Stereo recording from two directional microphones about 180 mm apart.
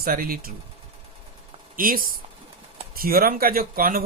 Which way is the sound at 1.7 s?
50° right (ahead or behind).